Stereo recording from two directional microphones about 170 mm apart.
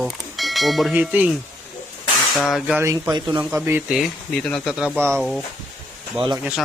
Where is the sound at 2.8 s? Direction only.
20° right (ahead or behind).